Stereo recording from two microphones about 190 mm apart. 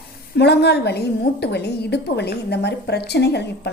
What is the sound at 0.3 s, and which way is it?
A woman's voice, 60° left (ahead or behind).